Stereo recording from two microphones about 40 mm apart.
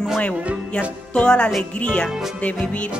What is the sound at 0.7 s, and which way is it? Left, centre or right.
Music, left.